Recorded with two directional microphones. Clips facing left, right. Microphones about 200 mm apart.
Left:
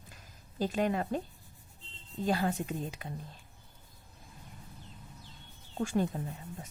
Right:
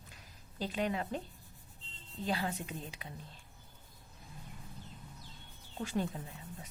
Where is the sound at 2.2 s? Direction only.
45° left (ahead or behind).